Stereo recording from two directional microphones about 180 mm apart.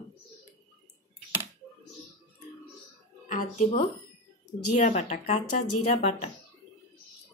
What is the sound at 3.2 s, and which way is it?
Speech, 50° left (ahead or behind).